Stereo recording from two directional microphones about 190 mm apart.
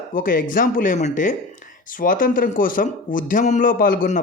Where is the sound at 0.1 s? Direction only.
45° left (ahead or behind).